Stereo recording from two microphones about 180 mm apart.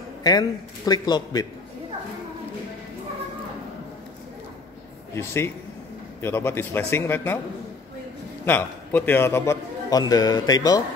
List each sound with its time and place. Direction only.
0.2 s a man's voice: 20° left (ahead or behind)
5.1 s a man's voice: 15° left (ahead or behind)
8.5 s a man's voice: 10° left (ahead or behind)